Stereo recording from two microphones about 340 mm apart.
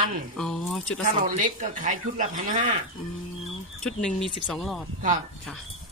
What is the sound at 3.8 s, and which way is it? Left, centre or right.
Speech, centre.